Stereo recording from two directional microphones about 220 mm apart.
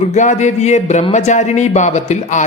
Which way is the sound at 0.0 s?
30° left (ahead or behind).